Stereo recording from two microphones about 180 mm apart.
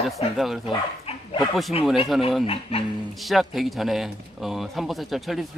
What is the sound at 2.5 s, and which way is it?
Speech, 30° left (ahead or behind).